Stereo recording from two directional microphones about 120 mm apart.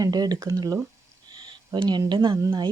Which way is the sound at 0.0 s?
35° right (ahead or behind).